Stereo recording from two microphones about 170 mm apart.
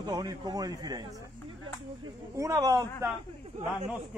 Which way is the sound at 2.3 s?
20° right (ahead or behind).